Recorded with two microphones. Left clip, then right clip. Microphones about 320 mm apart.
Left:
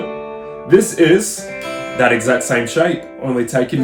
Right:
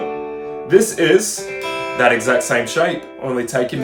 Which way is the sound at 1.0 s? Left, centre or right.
Centre.